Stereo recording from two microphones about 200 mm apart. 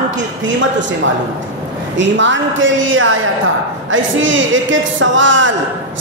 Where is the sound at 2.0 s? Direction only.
70° right (ahead or behind).